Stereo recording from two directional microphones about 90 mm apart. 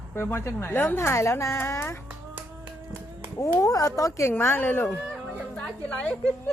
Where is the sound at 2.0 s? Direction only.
20° right (ahead or behind).